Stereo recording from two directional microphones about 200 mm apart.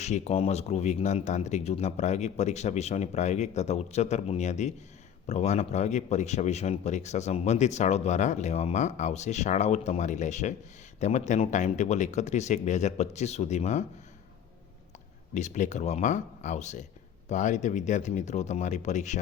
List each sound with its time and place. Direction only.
0.0 s a man's voice: 35° left (ahead or behind)
15.4 s a man's voice: 35° left (ahead or behind)